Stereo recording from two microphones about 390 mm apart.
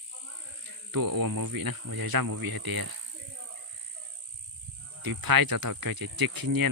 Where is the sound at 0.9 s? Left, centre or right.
Right.